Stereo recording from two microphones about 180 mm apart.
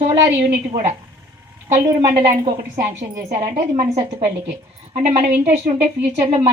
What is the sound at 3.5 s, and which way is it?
Speech, 35° right (ahead or behind).